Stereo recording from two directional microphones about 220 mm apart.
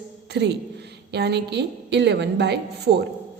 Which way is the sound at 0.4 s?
50° right (ahead or behind).